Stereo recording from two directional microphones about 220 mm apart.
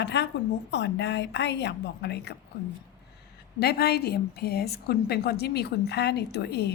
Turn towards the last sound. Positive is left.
turn(degrees=50)  # may be behind; listen again after turning